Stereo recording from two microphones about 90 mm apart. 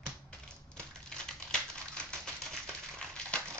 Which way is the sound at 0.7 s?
10° left (ahead or behind).